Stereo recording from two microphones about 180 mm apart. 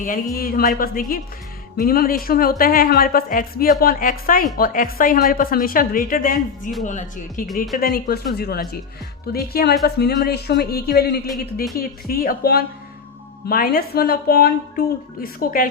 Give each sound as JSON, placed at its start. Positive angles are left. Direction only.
{"t": 0.3, "sound": "a woman's voice", "side_deg": 55}
{"t": 7.4, "sound": "speech", "side_deg": 0}
{"t": 7.8, "sound": "a woman's voice", "side_deg": 55}